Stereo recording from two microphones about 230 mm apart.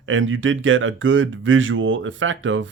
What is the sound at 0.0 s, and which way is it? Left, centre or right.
Speech, right.